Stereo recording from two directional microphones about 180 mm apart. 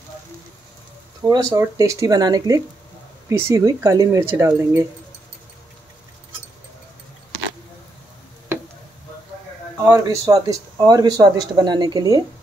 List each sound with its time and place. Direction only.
1.2 s speech: 20° right (ahead or behind)
9.8 s speech: 20° right (ahead or behind)